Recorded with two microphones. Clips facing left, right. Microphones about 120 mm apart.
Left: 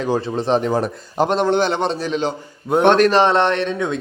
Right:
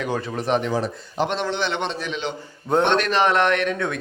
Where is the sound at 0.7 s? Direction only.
45° left (ahead or behind).